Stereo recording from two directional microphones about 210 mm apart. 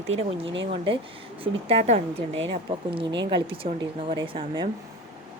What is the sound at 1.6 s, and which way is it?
Speech, 30° right (ahead or behind).